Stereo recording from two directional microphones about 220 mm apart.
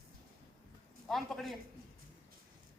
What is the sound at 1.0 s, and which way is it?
Speech, centre (ahead or behind).